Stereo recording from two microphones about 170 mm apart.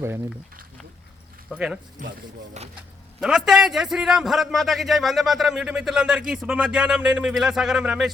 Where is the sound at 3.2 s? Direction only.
Centre (ahead or behind).